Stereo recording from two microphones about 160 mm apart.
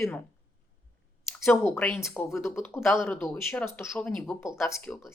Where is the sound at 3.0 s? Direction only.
15° left (ahead or behind).